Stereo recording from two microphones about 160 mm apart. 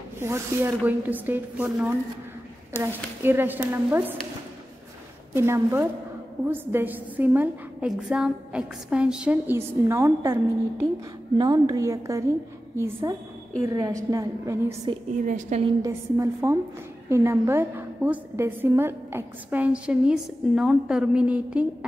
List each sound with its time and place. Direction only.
0.2 s a woman's voice: 15° right (ahead or behind)
3.2 s a woman's voice: 15° right (ahead or behind)
5.3 s a woman's voice: 15° right (ahead or behind)
15.2 s a woman's voice: 50° right (ahead or behind)
15.8 s a woman's voice: 20° right (ahead or behind)